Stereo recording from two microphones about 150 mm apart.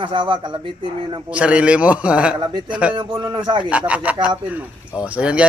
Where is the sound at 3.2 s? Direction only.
25° right (ahead or behind).